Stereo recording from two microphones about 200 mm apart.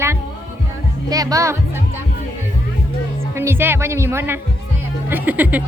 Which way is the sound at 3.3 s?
10° right (ahead or behind).